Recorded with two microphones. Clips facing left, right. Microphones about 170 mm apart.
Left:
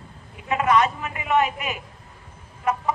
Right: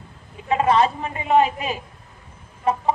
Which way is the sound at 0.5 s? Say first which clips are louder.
Right 2 dB; 30° right (ahead or behind).